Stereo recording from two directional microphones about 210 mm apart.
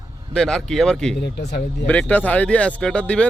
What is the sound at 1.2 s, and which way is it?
Speech, 55° left (ahead or behind).